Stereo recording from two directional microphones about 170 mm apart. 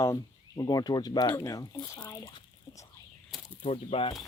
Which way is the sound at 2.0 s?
20° left (ahead or behind).